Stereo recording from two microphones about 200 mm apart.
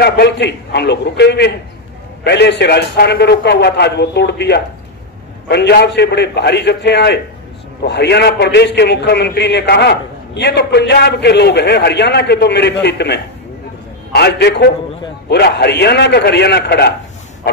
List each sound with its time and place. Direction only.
0.0 s a man's voice: 55° left (ahead or behind)